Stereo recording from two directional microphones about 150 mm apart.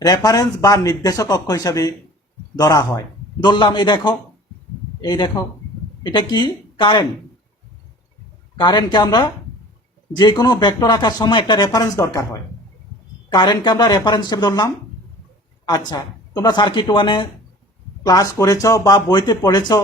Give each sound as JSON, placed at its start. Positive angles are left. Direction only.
{"t": 0.0, "sound": "speech", "side_deg": 25}
{"t": 8.6, "sound": "speech", "side_deg": 30}